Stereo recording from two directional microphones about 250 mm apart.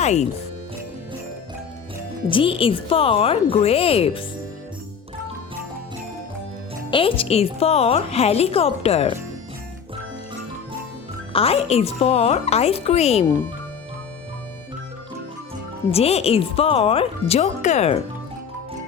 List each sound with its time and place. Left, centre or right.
0.0 s speech: left
2.3 s a woman's voice: left
6.9 s a woman's voice: left
11.3 s a woman's voice: left
15.9 s a woman's voice: left